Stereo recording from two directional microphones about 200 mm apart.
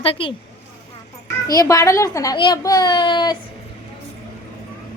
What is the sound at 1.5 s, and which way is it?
A child's voice, 15° left (ahead or behind).